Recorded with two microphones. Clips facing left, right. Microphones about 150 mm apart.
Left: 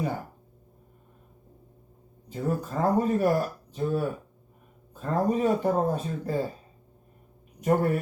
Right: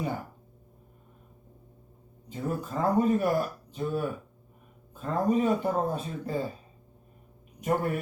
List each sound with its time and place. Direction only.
2.3 s speech: 40° left (ahead or behind)
7.6 s speech: 40° left (ahead or behind)